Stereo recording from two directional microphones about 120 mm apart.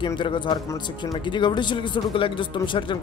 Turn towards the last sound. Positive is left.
turn(degrees=45)  # may be behind; listen again after turning